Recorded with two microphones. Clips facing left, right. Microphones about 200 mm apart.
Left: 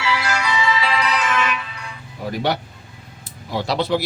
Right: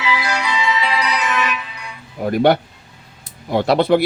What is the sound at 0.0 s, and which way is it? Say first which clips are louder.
Music: right 1 dB; 15° right (ahead or behind).